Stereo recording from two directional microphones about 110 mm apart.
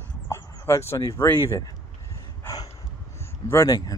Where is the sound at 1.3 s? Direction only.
25° left (ahead or behind).